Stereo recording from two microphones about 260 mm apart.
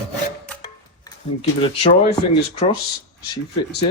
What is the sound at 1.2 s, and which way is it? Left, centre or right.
Speech, left.